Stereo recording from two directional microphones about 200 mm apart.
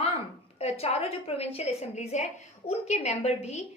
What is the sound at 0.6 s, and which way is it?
A woman's voice, 30° left (ahead or behind).